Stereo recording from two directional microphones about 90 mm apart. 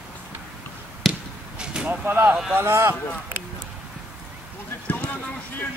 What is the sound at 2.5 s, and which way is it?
Speech, 30° right (ahead or behind).